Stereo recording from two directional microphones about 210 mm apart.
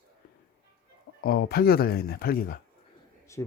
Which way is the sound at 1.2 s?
45° left (ahead or behind).